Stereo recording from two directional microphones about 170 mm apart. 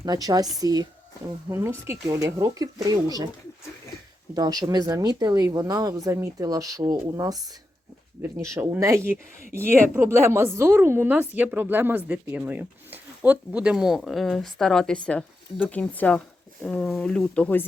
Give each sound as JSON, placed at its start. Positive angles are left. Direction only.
{"t": 0.0, "sound": "speech", "side_deg": -20}
{"t": 4.4, "sound": "a woman's voice", "side_deg": -25}